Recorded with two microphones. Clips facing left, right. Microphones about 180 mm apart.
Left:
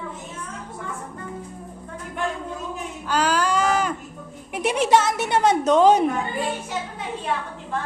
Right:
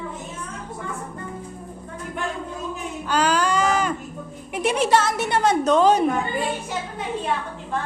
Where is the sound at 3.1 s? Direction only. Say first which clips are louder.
Right 1 dB; 5° left (ahead or behind).